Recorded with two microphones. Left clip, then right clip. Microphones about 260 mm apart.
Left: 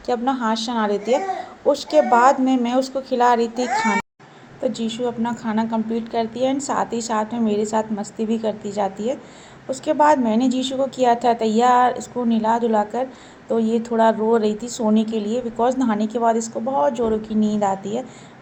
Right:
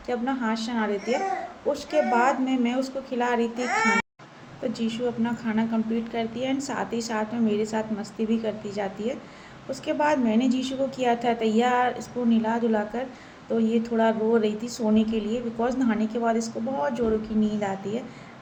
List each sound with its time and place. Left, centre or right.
0.0 s a woman's voice: left
3.6 s a woman's voice: centre
4.6 s a woman's voice: left